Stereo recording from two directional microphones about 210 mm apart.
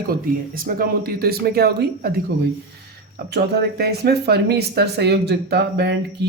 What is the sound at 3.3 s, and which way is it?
Speech, 50° right (ahead or behind).